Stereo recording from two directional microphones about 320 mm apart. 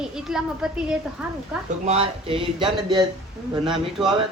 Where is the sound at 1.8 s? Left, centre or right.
Centre.